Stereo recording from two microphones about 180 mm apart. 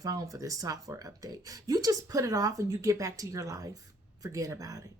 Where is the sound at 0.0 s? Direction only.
20° right (ahead or behind).